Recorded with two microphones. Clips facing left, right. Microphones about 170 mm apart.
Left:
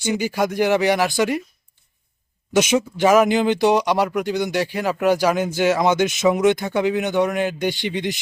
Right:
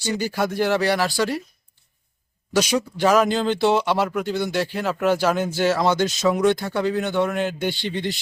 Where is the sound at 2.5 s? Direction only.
20° left (ahead or behind).